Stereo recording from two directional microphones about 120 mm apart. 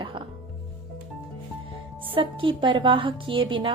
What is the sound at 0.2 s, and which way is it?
Music, 45° right (ahead or behind).